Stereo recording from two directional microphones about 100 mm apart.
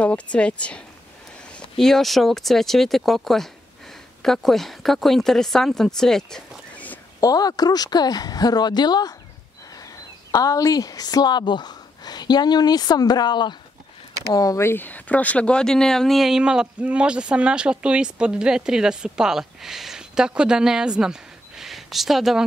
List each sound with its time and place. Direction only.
0.0 s speech: 10° left (ahead or behind)
7.2 s a woman's voice: 40° left (ahead or behind)
14.3 s speech: 35° left (ahead or behind)
14.7 s speech: 20° left (ahead or behind); by 22.4 s centre (ahead or behind)